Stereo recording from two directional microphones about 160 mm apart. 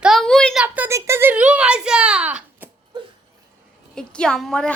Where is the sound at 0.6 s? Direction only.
10° right (ahead or behind).